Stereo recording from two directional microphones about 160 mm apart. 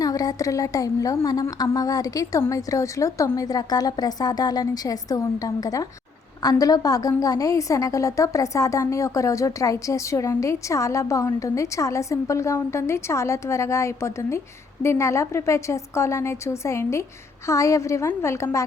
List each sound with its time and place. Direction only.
0.0 s a woman's voice: 20° left (ahead or behind)